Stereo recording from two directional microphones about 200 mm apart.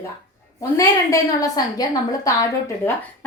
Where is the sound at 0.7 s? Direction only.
15° left (ahead or behind).